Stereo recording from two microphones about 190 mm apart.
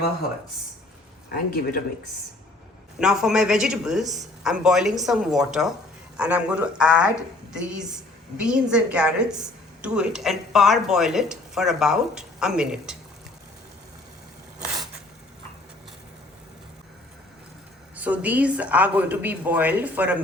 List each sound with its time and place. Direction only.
1.3 s speech: 50° left (ahead or behind)
3.0 s a woman's voice: 5° right (ahead or behind)
14.6 s a sound: centre (ahead or behind)
17.9 s a woman's voice: 10° right (ahead or behind)